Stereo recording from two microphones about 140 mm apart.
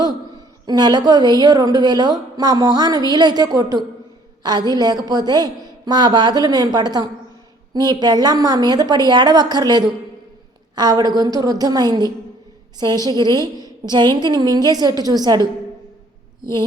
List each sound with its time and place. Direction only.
0.7 s a woman's voice: 30° right (ahead or behind)